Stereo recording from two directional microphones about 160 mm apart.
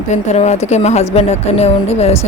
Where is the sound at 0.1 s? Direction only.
45° left (ahead or behind).